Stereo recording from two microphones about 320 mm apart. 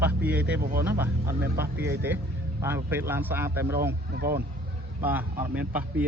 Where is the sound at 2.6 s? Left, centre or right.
Centre.